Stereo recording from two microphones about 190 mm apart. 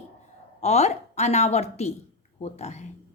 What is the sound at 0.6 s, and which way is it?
A woman's voice, 35° left (ahead or behind).